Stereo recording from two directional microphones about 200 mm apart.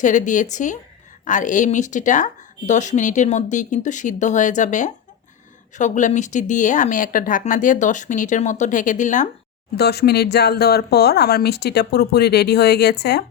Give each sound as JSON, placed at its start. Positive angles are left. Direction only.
{"t": 0.0, "sound": "a woman's voice", "side_deg": 40}
{"t": 9.7, "sound": "speech", "side_deg": 55}